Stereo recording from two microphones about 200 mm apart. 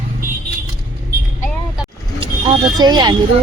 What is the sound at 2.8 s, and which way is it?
Speech, 20° right (ahead or behind).